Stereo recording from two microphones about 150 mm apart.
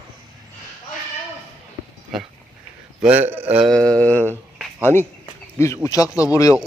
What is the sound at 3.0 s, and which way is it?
Speech, 10° right (ahead or behind).